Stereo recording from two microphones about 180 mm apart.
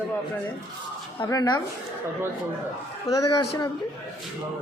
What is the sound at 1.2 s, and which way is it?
Speech, 20° left (ahead or behind).